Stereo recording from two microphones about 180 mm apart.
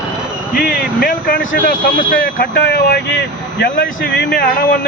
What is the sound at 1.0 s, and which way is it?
Speech, 55° left (ahead or behind).